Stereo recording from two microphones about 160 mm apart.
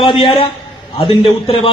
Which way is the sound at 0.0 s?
35° left (ahead or behind).